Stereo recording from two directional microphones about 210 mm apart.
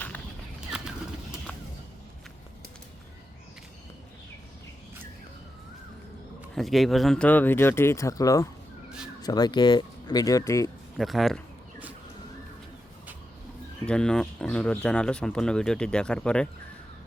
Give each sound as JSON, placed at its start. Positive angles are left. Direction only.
{"t": 0.7, "sound": "pigeon", "side_deg": -5}
{"t": 6.6, "sound": "speech", "side_deg": 0}
{"t": 10.9, "sound": "speech", "side_deg": 0}
{"t": 13.8, "sound": "speech", "side_deg": 5}